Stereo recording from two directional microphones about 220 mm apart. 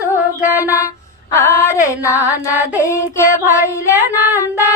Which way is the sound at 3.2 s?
10° right (ahead or behind).